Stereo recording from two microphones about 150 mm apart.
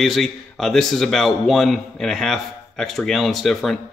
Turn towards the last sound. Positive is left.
turn(degrees=0)  # may be behind; listen again after turning